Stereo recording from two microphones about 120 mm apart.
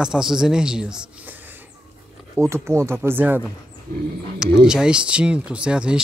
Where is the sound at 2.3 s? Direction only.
25° right (ahead or behind).